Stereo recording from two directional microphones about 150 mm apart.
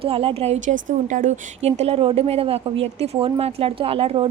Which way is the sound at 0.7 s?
55° right (ahead or behind).